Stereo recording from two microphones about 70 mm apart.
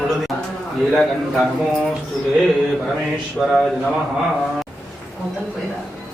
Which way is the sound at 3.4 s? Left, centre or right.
Centre.